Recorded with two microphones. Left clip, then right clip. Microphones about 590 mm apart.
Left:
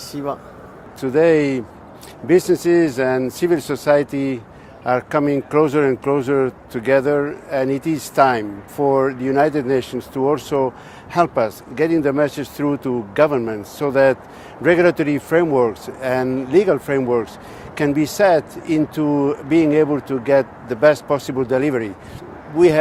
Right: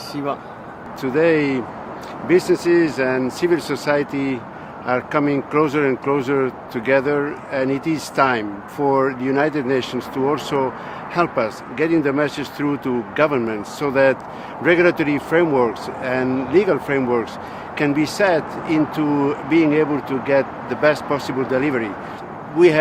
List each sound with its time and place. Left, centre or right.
1.0 s speech: left